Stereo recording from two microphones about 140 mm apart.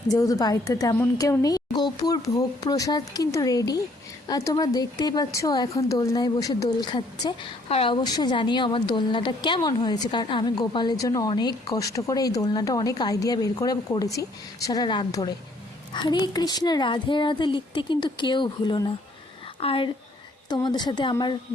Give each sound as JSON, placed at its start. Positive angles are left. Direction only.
{"t": 0.1, "sound": "a woman's voice", "side_deg": 25}
{"t": 7.7, "sound": "a woman's voice", "side_deg": 45}
{"t": 8.0, "sound": "a woman's voice", "side_deg": 30}